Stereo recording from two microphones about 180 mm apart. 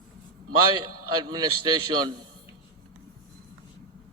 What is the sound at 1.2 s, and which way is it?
Speech, 25° right (ahead or behind).